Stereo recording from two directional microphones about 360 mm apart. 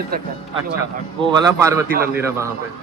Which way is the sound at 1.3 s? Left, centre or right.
Centre.